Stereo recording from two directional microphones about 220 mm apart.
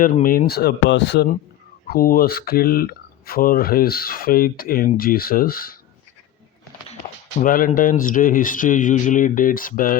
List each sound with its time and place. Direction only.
0.0 s speech: 40° left (ahead or behind)
7.3 s speech: 40° left (ahead or behind)